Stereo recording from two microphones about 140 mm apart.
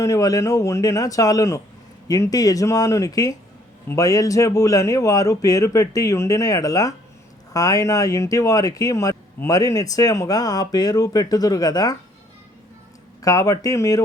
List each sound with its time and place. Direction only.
0.0 s speech: 25° left (ahead or behind)
13.2 s speech: 25° left (ahead or behind)